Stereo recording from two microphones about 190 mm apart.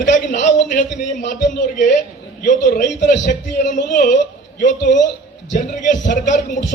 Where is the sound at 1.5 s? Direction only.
40° left (ahead or behind).